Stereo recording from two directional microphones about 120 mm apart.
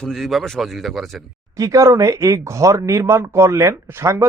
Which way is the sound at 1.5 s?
25° right (ahead or behind).